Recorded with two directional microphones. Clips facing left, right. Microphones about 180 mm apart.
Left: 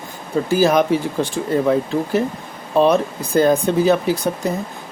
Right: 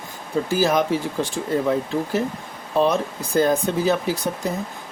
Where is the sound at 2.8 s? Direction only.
65° left (ahead or behind).